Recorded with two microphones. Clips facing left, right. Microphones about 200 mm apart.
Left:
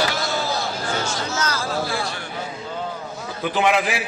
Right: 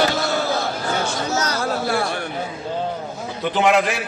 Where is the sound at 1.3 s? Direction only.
40° right (ahead or behind).